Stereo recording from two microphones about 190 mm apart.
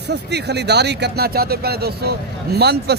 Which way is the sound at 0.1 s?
60° right (ahead or behind).